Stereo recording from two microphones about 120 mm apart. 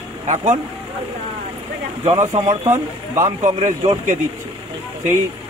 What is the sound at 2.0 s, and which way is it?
Speech, 75° right (ahead or behind).